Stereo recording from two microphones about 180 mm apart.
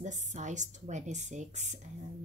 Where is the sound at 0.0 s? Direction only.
40° right (ahead or behind).